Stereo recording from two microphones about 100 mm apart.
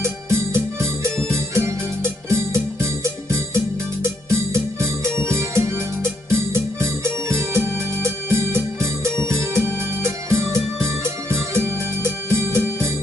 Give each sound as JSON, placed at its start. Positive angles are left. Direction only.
{"t": 0.0, "sound": "music", "side_deg": -25}